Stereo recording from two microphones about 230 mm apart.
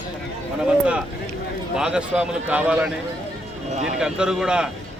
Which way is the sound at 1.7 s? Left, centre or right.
Centre.